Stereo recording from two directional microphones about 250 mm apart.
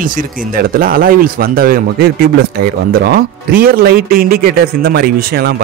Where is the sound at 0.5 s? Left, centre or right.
Right.